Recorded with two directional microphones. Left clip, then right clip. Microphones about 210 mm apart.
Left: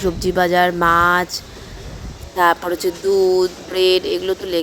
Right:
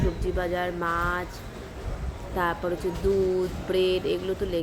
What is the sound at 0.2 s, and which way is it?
A woman's voice, 50° left (ahead or behind).